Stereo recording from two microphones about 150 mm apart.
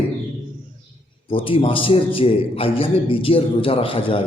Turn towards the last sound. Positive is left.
turn(degrees=35)  # may be behind; listen again after turning